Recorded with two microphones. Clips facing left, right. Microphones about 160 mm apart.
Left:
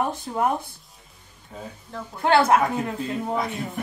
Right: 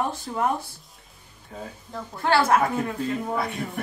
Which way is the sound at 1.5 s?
Centre (ahead or behind).